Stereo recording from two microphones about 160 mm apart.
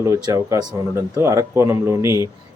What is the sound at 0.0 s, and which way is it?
A man's voice, 20° right (ahead or behind).